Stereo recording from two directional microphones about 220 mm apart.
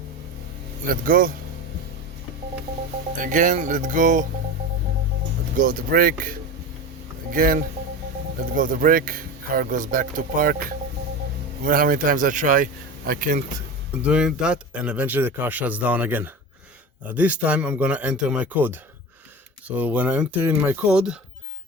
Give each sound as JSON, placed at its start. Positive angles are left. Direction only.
{"t": 0.9, "sound": "speech", "side_deg": -40}
{"t": 3.2, "sound": "speech", "side_deg": -35}
{"t": 5.5, "sound": "speech", "side_deg": -40}
{"t": 7.3, "sound": "speech", "side_deg": -40}
{"t": 11.6, "sound": "speech", "side_deg": -40}
{"t": 14.0, "sound": "speech", "side_deg": -5}